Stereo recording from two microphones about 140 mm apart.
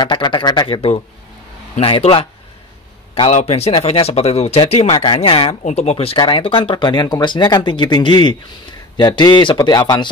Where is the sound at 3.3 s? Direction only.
50° left (ahead or behind).